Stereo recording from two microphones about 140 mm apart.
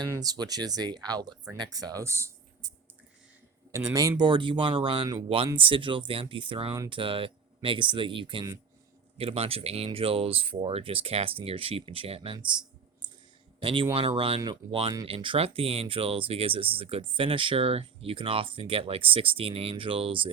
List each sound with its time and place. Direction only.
0.1 s speech: 25° right (ahead or behind)
3.7 s speech: 20° right (ahead or behind)
4.2 s speech: 35° right (ahead or behind)
13.6 s speech: 40° right (ahead or behind)